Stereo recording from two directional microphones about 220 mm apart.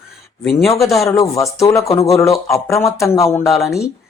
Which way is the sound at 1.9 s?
25° left (ahead or behind).